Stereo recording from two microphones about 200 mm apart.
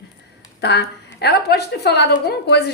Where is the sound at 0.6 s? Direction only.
55° left (ahead or behind).